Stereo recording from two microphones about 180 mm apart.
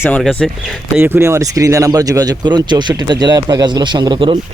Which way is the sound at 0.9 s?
10° right (ahead or behind).